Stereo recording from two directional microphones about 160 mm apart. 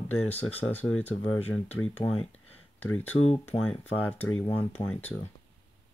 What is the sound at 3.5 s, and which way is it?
Speech, 35° left (ahead or behind).